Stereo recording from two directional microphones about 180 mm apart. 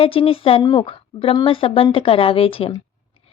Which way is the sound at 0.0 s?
30° left (ahead or behind).